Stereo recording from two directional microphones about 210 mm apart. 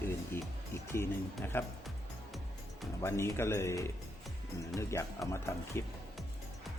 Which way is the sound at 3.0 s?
10° left (ahead or behind).